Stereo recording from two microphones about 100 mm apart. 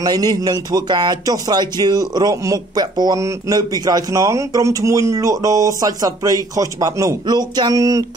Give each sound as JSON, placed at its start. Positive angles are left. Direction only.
{"t": 0.0, "sound": "speech", "side_deg": -40}